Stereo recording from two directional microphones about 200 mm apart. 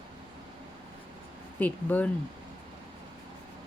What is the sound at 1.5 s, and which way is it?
Speech, 10° left (ahead or behind).